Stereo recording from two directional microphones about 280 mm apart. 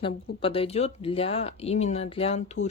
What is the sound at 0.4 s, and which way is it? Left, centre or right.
Speech, centre.